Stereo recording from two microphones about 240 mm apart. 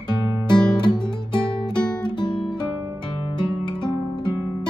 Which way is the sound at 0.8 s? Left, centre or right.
Centre.